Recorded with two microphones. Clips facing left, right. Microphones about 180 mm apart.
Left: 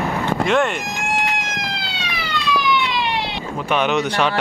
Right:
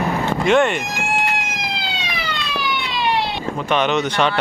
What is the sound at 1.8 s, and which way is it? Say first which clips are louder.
Police car: right 2 dB; 20° right (ahead or behind).